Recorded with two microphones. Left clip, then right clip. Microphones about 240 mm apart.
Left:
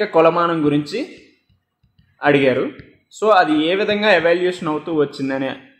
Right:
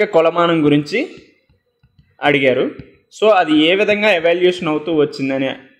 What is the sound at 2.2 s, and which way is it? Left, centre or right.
A man's voice, right.